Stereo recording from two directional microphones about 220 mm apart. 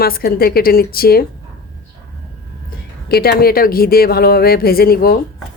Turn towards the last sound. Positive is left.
turn(degrees=40)  # may be behind; listen again after turning